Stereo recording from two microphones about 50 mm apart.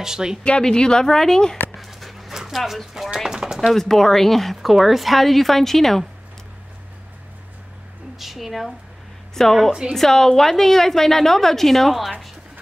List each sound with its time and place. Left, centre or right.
0.0 s speech: centre
0.4 s a woman's voice: centre
1.8 s dog: centre
3.3 s chopping: centre
3.7 s a woman's voice: centre
8.2 s a woman's voice: centre
9.7 s speech: centre
9.9 s a woman's voice: centre